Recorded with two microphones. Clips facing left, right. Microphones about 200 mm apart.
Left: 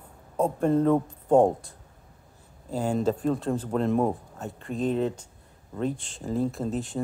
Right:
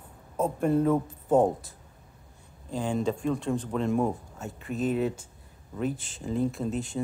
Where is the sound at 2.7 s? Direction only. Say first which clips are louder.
Left 3 dB; 40° left (ahead or behind).